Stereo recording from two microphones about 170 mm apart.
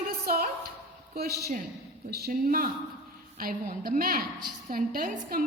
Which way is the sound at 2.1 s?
65° right (ahead or behind).